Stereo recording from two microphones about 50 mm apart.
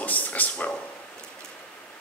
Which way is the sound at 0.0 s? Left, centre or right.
Left.